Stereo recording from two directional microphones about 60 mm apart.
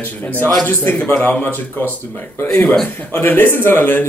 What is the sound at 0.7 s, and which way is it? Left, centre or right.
Speech, left.